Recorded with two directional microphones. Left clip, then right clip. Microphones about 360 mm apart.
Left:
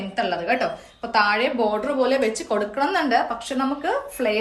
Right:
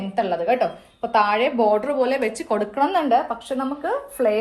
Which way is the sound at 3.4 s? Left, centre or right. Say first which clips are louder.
Left 1 dB; centre.